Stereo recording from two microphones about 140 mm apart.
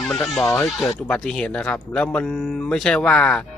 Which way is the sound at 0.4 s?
20° left (ahead or behind).